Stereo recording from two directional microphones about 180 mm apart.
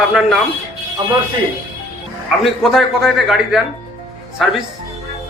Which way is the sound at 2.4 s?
Centre (ahead or behind).